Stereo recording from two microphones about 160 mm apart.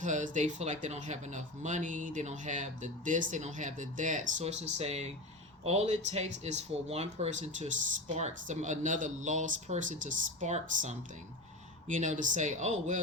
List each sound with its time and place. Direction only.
0.0 s speech: 50° right (ahead or behind)